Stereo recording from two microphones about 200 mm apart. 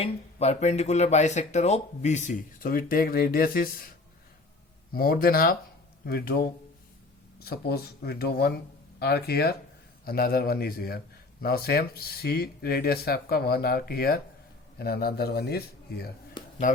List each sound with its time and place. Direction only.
0.0 s speech: 30° left (ahead or behind)
4.9 s a man's voice: 50° left (ahead or behind)
16.4 s a sound: 20° left (ahead or behind)